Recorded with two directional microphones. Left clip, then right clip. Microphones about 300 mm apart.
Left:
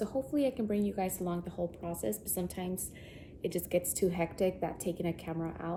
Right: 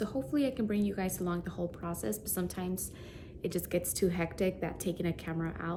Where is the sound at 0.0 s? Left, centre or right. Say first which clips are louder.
Left 1 dB; centre.